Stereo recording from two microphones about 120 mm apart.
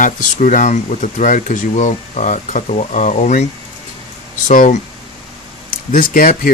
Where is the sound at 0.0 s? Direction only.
90° left.